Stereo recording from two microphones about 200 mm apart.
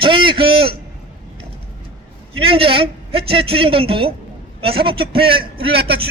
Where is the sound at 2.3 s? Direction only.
25° right (ahead or behind).